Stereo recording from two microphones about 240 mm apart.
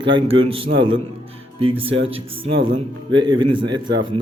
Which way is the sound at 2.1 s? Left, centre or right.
Right.